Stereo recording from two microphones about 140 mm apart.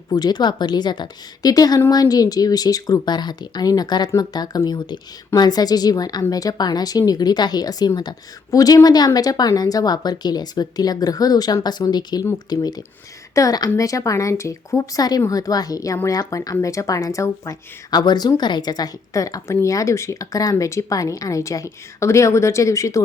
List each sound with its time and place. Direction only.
0.1 s speech: 30° left (ahead or behind)